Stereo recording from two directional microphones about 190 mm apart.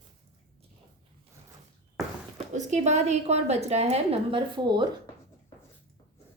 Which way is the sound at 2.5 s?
40° right (ahead or behind).